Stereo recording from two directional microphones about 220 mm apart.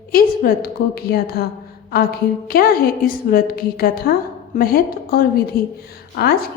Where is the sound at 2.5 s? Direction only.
45° left (ahead or behind).